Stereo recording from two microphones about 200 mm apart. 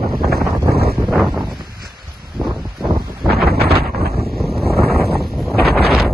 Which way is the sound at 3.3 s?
50° right (ahead or behind).